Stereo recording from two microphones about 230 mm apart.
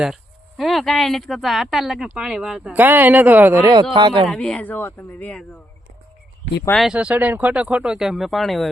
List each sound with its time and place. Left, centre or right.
0.0 s speech: centre; by 4.3 s right
4.3 s speech: centre
6.7 s speech: centre